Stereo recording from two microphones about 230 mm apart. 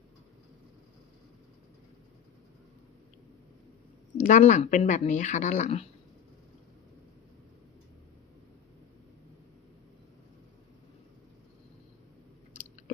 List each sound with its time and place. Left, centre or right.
4.2 s speech: left